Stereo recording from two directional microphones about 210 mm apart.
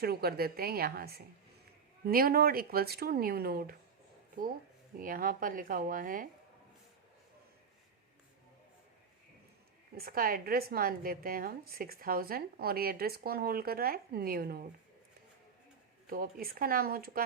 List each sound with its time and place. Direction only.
0.0 s a woman's voice: 45° right (ahead or behind)
4.9 s speech: 40° right (ahead or behind)
9.9 s a woman's voice: 45° right (ahead or behind)
16.0 s a woman's voice: 45° right (ahead or behind)